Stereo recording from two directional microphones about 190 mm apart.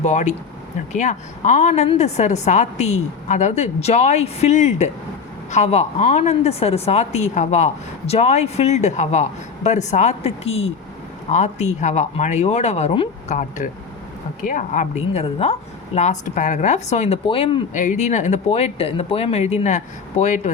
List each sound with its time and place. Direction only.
0.0 s speech: 35° left (ahead or behind)
13.6 s speech: 40° left (ahead or behind)